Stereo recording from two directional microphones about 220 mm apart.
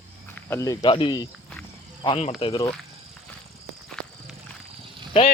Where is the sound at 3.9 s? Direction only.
Centre (ahead or behind).